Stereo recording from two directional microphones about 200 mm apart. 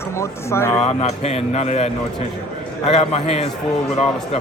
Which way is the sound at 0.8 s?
30° left (ahead or behind).